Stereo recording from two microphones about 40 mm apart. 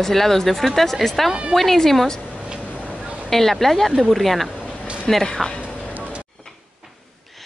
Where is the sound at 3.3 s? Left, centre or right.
Centre.